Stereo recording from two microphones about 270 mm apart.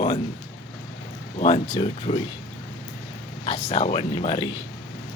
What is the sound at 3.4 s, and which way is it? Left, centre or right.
Speech, centre.